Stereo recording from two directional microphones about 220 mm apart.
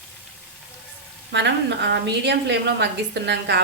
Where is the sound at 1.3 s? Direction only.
55° right (ahead or behind).